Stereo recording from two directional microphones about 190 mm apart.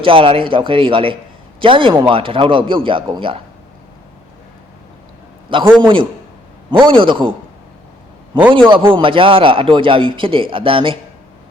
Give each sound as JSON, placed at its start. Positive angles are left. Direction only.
{"t": 0.0, "sound": "a man's voice", "side_deg": -30}
{"t": 5.8, "sound": "a man's voice", "side_deg": -25}
{"t": 8.5, "sound": "a man's voice", "side_deg": -25}